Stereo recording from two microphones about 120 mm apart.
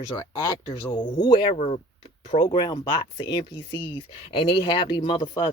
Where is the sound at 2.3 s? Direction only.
40° left (ahead or behind).